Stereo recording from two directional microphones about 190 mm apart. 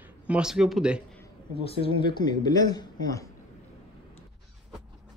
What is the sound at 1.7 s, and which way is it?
Speech, 25° left (ahead or behind).